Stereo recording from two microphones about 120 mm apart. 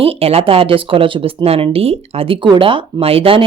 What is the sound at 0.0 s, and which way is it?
Speech, 55° right (ahead or behind).